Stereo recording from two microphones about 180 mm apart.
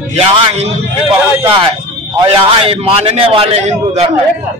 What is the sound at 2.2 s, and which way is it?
A man's voice, 30° right (ahead or behind).